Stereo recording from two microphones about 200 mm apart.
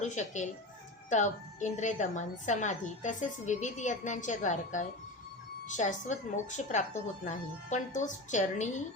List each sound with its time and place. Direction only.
0.0 s a woman's voice: 35° left (ahead or behind)